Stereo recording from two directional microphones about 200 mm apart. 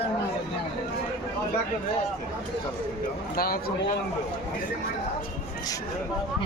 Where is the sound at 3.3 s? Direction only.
50° left (ahead or behind).